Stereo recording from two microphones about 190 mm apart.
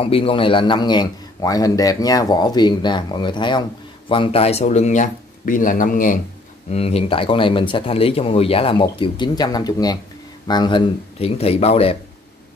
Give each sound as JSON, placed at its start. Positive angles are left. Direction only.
{"t": 0.0, "sound": "a man's voice", "side_deg": 30}
{"t": 6.7, "sound": "a man's voice", "side_deg": 30}